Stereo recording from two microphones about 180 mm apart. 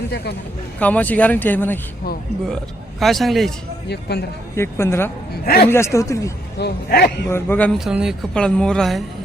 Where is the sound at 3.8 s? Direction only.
65° left (ahead or behind).